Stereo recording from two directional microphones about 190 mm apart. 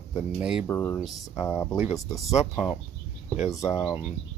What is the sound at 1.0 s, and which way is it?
Speech, centre (ahead or behind).